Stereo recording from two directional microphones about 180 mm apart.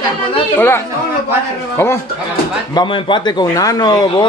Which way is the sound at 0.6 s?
10° left (ahead or behind).